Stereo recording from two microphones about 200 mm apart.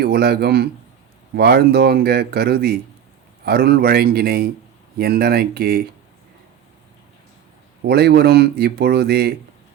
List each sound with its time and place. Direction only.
0.0 s speech: 50° right (ahead or behind)
7.9 s speech: 55° right (ahead or behind)